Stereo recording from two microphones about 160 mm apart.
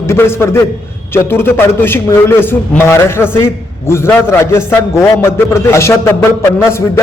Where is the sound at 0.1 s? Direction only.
15° left (ahead or behind).